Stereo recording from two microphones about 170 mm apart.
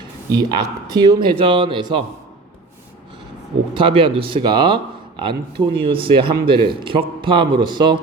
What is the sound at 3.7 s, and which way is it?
Speech, 30° right (ahead or behind).